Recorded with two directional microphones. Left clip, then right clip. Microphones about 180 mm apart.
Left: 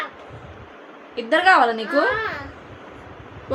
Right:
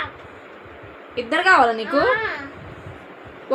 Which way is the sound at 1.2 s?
15° right (ahead or behind).